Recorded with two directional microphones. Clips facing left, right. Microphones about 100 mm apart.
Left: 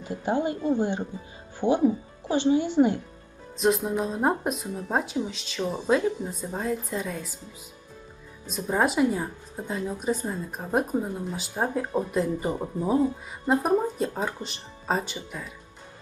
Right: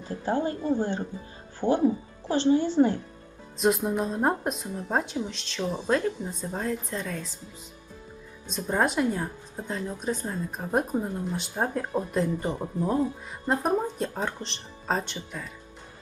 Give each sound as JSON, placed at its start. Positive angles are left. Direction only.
{"t": 0.0, "sound": "speech", "side_deg": 15}
{"t": 3.6, "sound": "a woman's voice", "side_deg": 0}
{"t": 8.4, "sound": "a woman's voice", "side_deg": 5}